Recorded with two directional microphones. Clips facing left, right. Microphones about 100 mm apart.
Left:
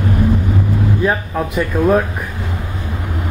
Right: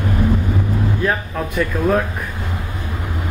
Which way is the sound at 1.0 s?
10° left (ahead or behind).